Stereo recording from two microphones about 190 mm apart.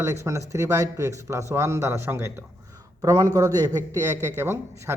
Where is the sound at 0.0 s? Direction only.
15° right (ahead or behind).